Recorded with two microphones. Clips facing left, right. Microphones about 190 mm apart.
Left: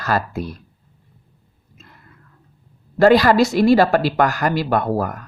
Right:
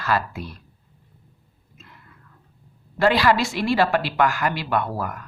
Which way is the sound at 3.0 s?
45° left (ahead or behind).